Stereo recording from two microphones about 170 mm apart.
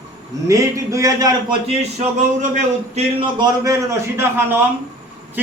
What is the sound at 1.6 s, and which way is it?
Speech, 35° right (ahead or behind).